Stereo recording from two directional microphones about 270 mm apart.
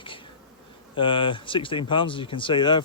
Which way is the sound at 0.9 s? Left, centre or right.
Centre.